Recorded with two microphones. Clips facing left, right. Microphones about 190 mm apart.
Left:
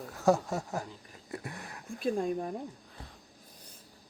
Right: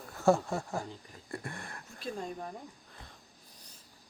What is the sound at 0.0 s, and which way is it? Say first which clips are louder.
Speech: even; centre (ahead or behind).